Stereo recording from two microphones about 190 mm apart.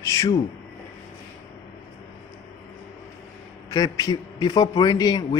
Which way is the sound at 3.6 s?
20° left (ahead or behind).